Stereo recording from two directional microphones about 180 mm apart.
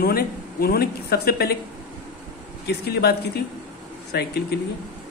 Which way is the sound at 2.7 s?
65° left (ahead or behind).